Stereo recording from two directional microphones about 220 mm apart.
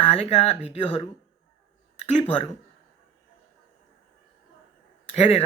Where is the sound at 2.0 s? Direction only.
30° left (ahead or behind).